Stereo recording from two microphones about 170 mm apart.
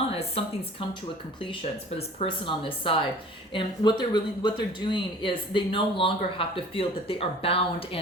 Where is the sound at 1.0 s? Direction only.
30° left (ahead or behind).